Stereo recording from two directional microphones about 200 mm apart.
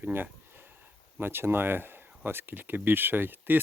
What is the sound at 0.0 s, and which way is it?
Speech, 10° right (ahead or behind).